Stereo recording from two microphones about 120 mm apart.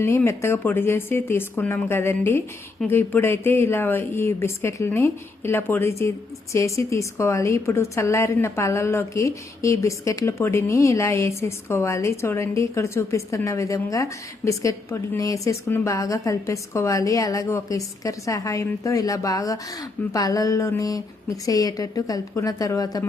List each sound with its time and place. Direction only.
0.3 s a woman's voice: 20° left (ahead or behind)